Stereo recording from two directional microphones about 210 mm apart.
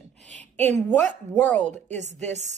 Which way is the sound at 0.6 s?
10° left (ahead or behind).